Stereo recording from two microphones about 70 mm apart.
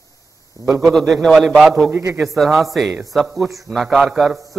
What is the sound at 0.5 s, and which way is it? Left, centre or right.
Speech, right.